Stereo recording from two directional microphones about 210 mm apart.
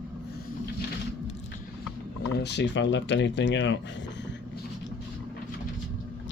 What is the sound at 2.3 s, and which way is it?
Speech, 55° left (ahead or behind).